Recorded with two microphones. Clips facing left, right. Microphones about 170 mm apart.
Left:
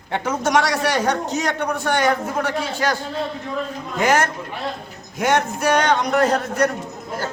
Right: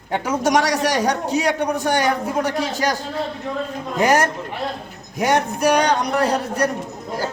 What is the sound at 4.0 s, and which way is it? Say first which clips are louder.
Speech: right 1 dB; 35° right (ahead or behind).